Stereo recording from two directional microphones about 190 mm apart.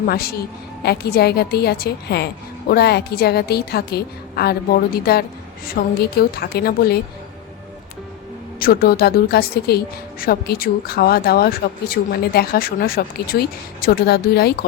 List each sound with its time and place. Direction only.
0.0 s a woman's voice: 50° left (ahead or behind)
8.5 s a woman's voice: 50° left (ahead or behind)